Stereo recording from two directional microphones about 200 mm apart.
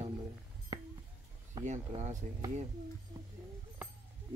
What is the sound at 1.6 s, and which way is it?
Speech, 35° right (ahead or behind).